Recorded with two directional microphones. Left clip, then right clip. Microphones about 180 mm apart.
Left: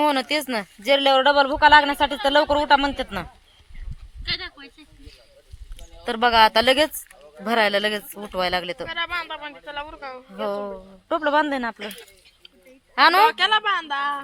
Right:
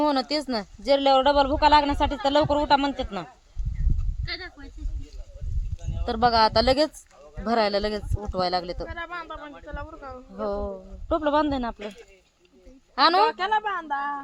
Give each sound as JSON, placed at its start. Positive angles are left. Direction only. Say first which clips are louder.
{"t": 0.0, "sound": "a man's voice", "louder": "left 3 dB", "side_deg": 15}
{"t": 4.3, "sound": "speech", "louder": "left 6 dB", "side_deg": -50}
{"t": 6.0, "sound": "a man's voice", "louder": "left 4 dB", "side_deg": 15}
{"t": 8.1, "sound": "speech", "louder": "left 1 dB", "side_deg": 35}
{"t": 8.4, "sound": "a man's voice", "louder": "left 2 dB", "side_deg": 15}
{"t": 8.9, "sound": "speech", "louder": "left 7 dB", "side_deg": -25}
{"t": 10.3, "sound": "a sound", "louder": "left 2 dB", "side_deg": 20}
{"t": 11.1, "sound": "a man's voice", "louder": "left 2 dB", "side_deg": 10}
{"t": 13.0, "sound": "a man's voice", "louder": "left 4 dB", "side_deg": 15}
{"t": 13.2, "sound": "speech", "louder": "left 5 dB", "side_deg": -30}